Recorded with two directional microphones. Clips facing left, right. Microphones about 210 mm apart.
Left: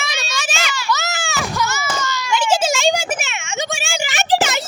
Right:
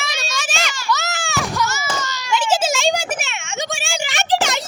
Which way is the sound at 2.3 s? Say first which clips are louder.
Left 1 dB; centre (ahead or behind).